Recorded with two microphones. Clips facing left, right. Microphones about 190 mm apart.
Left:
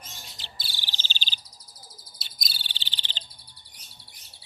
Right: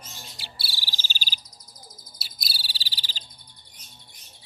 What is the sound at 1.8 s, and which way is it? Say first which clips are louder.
Bird: right 3 dB; 30° left (ahead or behind).